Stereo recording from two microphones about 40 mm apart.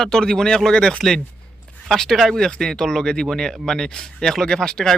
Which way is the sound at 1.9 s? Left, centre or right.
Centre.